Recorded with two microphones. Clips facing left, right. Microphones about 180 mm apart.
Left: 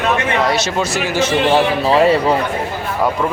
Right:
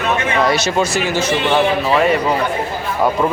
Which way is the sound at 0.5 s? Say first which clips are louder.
Right 1 dB; centre (ahead or behind).